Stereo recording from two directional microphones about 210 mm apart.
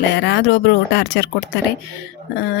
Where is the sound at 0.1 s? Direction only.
55° left (ahead or behind).